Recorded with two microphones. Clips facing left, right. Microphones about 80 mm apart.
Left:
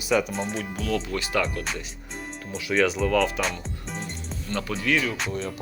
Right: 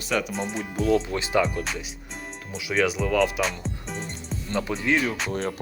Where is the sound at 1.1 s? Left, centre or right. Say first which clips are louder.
Right 3 dB; right.